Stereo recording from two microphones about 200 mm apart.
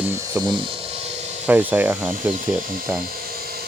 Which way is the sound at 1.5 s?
10° right (ahead or behind).